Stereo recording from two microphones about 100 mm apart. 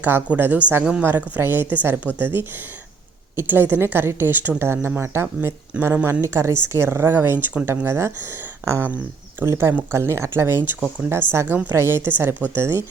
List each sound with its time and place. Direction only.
0.0 s speech: 20° right (ahead or behind)